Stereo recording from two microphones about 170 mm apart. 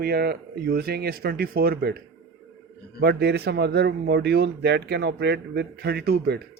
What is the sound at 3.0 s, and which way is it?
Speech, 75° right (ahead or behind).